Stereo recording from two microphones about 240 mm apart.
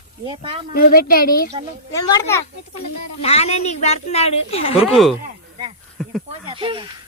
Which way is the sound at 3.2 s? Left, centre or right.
Left.